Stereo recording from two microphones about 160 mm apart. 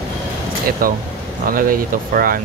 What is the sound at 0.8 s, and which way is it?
Speech, 65° right (ahead or behind).